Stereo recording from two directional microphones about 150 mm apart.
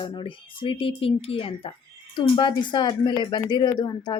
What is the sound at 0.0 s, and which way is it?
Speech, 35° left (ahead or behind).